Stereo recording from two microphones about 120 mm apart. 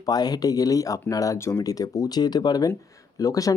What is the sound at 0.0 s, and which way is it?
Speech, 35° left (ahead or behind).